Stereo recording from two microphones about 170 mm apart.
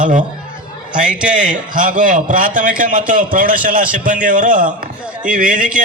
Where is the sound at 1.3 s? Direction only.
50° right (ahead or behind).